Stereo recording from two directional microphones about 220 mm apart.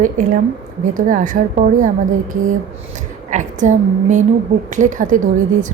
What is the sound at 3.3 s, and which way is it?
A woman's voice, 35° right (ahead or behind).